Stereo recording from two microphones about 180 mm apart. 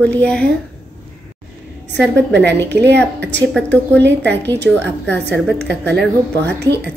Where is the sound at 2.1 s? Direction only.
70° right (ahead or behind).